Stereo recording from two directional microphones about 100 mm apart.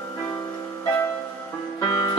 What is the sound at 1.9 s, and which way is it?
Music, 35° left (ahead or behind).